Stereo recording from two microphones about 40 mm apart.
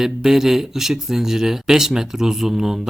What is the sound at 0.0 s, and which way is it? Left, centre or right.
Speech, centre.